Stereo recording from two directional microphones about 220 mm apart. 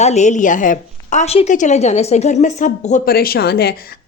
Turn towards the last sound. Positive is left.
turn(degrees=45)  # may be behind; listen again after turning